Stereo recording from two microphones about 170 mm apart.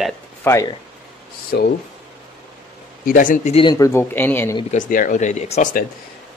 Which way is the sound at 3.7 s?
20° left (ahead or behind).